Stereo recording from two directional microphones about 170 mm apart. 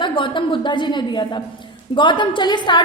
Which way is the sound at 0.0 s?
30° left (ahead or behind).